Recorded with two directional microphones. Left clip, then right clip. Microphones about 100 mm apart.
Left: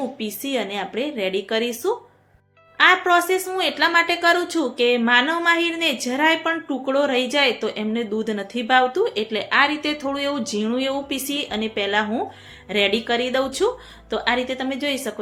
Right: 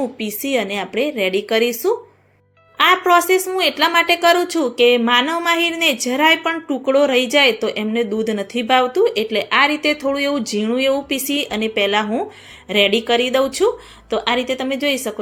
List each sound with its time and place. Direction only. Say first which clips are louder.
0.2 s a woman's voice: right 5 dB; 40° right (ahead or behind)